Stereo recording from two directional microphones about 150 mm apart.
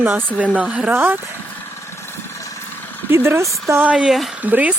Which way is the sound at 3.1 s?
15° right (ahead or behind).